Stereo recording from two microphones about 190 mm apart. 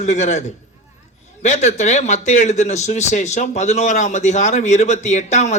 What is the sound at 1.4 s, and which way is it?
Speech, 35° left (ahead or behind).